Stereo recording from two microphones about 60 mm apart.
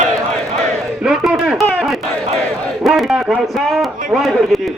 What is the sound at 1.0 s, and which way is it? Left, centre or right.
Speech, centre.